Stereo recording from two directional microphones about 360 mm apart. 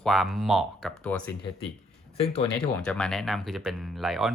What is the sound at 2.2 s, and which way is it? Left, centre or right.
Speech, centre.